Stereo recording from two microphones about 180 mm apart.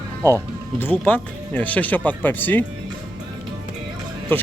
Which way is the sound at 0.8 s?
10° left (ahead or behind).